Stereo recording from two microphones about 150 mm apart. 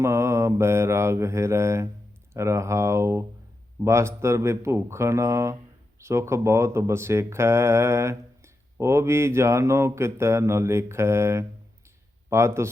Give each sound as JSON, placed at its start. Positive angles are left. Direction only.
{"t": 0.0, "sound": "speech", "side_deg": -20}